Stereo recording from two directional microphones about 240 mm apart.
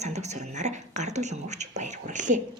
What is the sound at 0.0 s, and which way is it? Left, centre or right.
A woman's voice, right.